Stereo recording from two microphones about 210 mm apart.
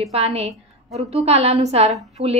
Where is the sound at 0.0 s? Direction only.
30° right (ahead or behind).